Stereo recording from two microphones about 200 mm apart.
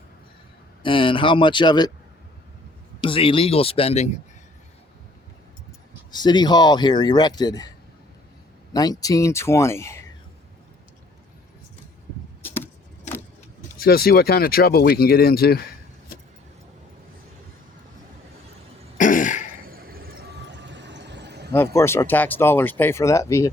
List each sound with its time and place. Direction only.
0.8 s speech: 25° left (ahead or behind)
3.0 s speech: 25° left (ahead or behind)
6.1 s speech: 20° left (ahead or behind)
8.7 s speech: 20° left (ahead or behind)
12.4 s a sound: 10° left (ahead or behind)
13.7 s speech: 50° left (ahead or behind)
18.9 s cough: 40° left (ahead or behind)
19.6 s vehicle: 45° right (ahead or behind)
21.5 s speech: 10° left (ahead or behind)